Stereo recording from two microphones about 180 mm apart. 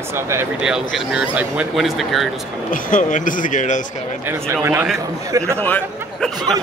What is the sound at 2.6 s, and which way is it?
Speech, 45° left (ahead or behind).